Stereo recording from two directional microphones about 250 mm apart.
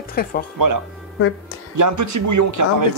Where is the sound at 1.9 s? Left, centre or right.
Right.